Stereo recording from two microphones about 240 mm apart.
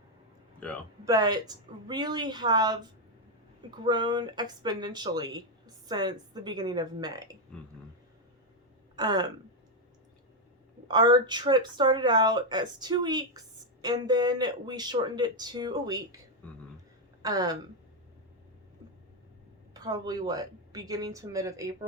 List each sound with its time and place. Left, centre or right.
0.6 s speech: centre
1.0 s speech: centre
9.0 s speech: centre
10.8 s speech: centre
16.4 s a sound: centre
17.2 s speech: centre
19.7 s speech: centre